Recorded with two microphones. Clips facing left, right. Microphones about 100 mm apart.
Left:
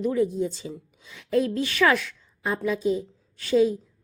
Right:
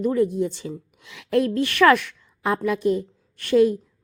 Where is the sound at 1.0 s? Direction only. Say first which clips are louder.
Right 2 dB; 75° right (ahead or behind).